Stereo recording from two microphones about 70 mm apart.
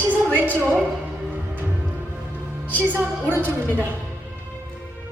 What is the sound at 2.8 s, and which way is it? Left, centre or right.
A woman's voice, right.